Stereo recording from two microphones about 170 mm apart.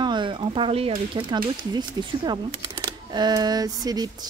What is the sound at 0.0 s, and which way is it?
A woman's voice, 25° right (ahead or behind).